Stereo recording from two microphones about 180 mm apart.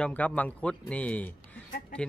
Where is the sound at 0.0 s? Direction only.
10° left (ahead or behind).